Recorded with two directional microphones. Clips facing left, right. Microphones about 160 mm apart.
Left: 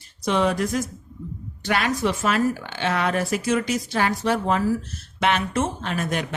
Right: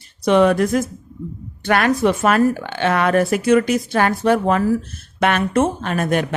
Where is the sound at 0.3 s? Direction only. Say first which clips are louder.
Right 8 dB; 60° right (ahead or behind).